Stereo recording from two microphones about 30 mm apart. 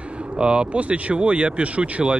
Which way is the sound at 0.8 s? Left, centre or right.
Right.